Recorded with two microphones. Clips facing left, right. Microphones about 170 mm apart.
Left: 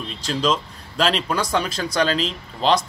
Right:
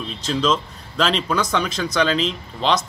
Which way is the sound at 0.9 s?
35° left (ahead or behind).